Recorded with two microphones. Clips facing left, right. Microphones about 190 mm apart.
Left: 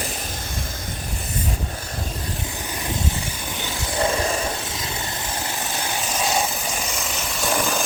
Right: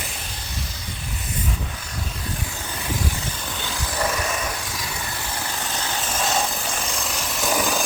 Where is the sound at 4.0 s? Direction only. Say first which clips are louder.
Left 4 dB; 30° left (ahead or behind).